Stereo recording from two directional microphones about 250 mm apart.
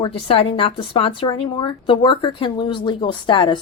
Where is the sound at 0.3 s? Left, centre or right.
Left.